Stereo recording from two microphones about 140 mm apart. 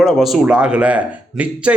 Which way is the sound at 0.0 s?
Centre (ahead or behind).